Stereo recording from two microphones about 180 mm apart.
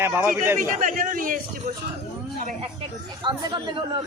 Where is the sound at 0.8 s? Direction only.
45° right (ahead or behind).